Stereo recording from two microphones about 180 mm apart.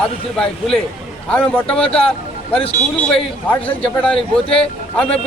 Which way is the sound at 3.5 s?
10° left (ahead or behind).